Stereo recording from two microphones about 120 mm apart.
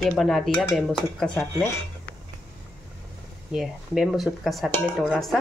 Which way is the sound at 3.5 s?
5° right (ahead or behind).